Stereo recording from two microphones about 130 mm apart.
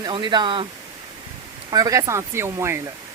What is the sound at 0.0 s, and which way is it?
Speech, 35° right (ahead or behind).